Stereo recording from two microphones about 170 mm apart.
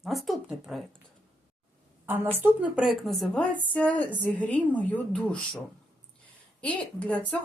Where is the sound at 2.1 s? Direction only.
10° right (ahead or behind); by 5.6 s 5° left (ahead or behind).